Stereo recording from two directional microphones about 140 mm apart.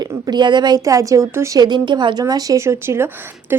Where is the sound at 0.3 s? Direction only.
30° right (ahead or behind).